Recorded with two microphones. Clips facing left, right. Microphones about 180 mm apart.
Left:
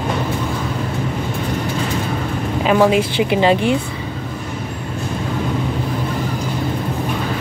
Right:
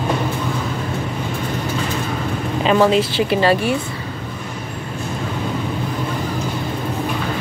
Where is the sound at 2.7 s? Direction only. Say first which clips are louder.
Left 1 dB; 10° left (ahead or behind).